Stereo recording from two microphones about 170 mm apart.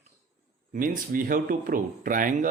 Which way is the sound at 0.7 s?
55° right (ahead or behind).